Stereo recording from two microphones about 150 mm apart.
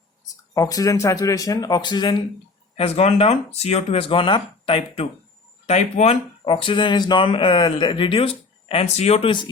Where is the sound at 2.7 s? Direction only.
40° left (ahead or behind).